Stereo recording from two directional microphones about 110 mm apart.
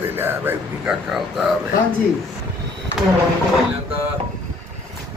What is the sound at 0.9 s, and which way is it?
Speech, 5° right (ahead or behind).